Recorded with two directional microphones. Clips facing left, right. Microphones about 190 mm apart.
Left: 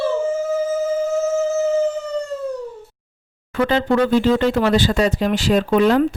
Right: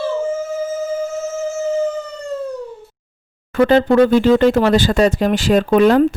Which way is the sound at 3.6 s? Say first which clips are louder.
Right 5 dB; 50° right (ahead or behind).